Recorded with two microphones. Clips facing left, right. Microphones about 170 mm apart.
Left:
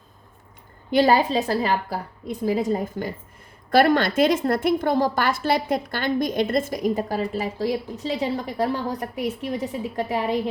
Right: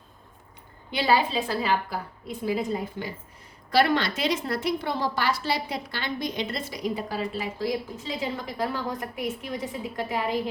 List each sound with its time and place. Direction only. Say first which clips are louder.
0.9 s a woman's voice: left 6 dB; 45° left (ahead or behind)